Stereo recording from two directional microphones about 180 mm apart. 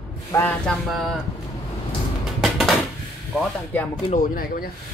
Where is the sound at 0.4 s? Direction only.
10° left (ahead or behind).